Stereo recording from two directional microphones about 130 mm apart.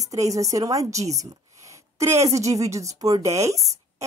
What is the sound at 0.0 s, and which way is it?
Speech, 25° right (ahead or behind).